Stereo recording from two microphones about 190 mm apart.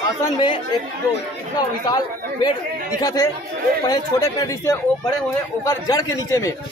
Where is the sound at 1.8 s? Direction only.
20° left (ahead or behind).